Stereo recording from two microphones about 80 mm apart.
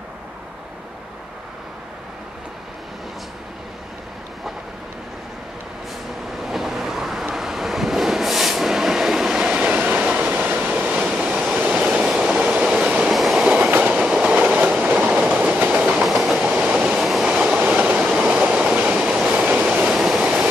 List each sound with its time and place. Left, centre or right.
6.4 s vehicle: centre
11.5 s train: centre
11.8 s train: centre
13.1 s train: centre
13.5 s train: centre
16.0 s train: centre
16.4 s train: centre
17.9 s train: centre
19.8 s train: centre